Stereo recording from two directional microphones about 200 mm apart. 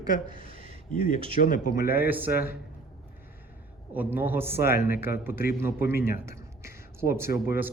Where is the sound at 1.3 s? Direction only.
45° left (ahead or behind).